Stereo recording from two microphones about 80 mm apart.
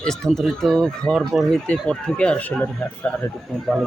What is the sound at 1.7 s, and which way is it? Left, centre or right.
Speech, centre.